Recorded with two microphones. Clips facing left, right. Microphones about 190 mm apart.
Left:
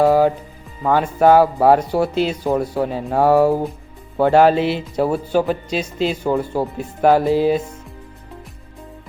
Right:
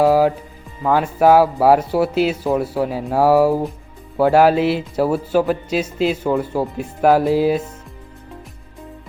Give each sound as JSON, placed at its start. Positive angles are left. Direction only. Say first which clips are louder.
{"t": 0.0, "sound": "speech", "louder": "even", "side_deg": -5}